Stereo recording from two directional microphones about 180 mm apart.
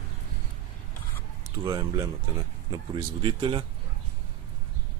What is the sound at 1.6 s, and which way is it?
Speech, 30° right (ahead or behind).